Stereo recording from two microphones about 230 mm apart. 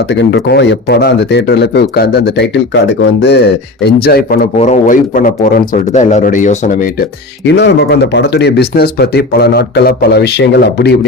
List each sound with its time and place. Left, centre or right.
0.1 s speech: left
4.5 s a man's voice: left
7.4 s speech: left